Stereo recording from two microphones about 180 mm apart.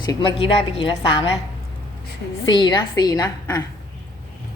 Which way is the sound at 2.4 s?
25° left (ahead or behind).